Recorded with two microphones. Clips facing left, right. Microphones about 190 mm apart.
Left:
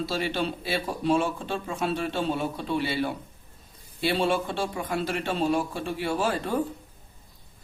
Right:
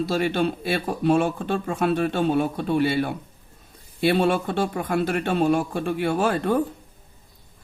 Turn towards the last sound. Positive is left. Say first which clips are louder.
# right 5 dB
turn(degrees=-55)  # may be behind; listen again after turning